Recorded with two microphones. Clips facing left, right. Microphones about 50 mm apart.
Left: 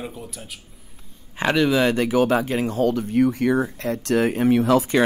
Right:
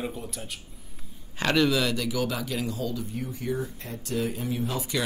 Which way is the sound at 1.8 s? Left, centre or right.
Left.